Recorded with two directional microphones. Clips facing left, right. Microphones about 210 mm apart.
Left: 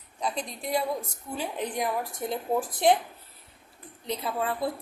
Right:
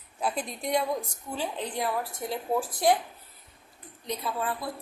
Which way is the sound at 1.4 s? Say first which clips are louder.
Left 1 dB; 15° left (ahead or behind).